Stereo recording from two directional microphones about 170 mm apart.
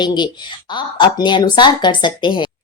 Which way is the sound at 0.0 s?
25° left (ahead or behind).